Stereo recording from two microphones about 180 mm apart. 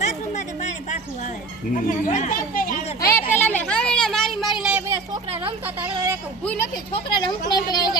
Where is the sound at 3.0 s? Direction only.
15° left (ahead or behind); by 4.8 s 5° right (ahead or behind).